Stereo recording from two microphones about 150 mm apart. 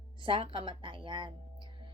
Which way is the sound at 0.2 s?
35° right (ahead or behind).